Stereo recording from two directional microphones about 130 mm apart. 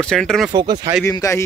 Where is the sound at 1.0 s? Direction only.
25° left (ahead or behind).